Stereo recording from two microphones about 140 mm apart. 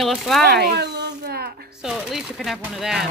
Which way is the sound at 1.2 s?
90° right.